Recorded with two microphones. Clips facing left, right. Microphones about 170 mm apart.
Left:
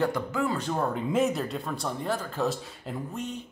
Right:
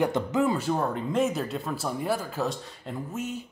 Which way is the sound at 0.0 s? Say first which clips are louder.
Right 3 dB; 20° right (ahead or behind).